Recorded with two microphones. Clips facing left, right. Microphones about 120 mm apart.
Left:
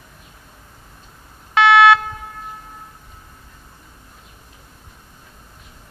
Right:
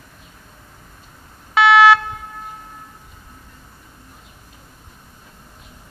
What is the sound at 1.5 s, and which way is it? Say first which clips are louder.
Alarm: even; 5° right (ahead or behind).